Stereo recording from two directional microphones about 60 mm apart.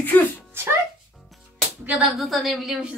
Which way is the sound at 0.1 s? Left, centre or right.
Left.